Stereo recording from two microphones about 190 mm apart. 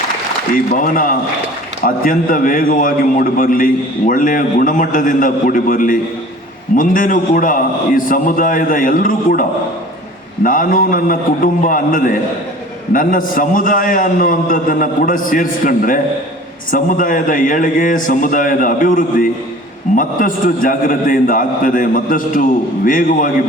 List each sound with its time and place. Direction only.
0.5 s a man's voice: 45° left (ahead or behind)